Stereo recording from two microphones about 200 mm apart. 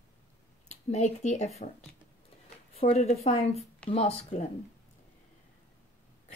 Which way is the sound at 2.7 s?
30° left (ahead or behind).